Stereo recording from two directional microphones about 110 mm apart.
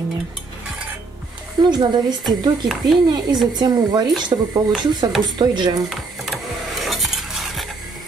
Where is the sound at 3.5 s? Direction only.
40° right (ahead or behind).